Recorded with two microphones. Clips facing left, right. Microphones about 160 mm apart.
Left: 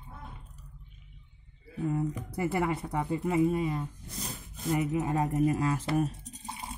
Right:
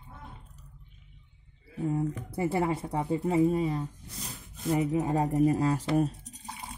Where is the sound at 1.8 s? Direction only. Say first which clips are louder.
Right 1 dB; 30° right (ahead or behind).